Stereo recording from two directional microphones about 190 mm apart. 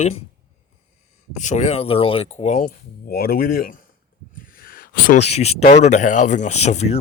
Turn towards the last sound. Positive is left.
turn(degrees=35)  # may be behind; listen again after turning